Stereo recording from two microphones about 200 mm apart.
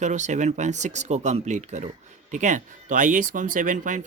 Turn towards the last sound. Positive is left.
turn(degrees=-40)  # may be behind; listen again after turning